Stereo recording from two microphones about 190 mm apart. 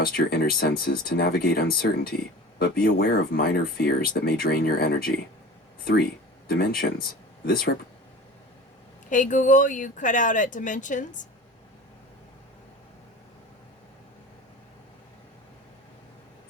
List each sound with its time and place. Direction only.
0.0 s speech: 55° left (ahead or behind)
9.0 s speech: 40° left (ahead or behind)